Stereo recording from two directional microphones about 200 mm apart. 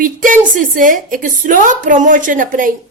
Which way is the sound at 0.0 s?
40° right (ahead or behind).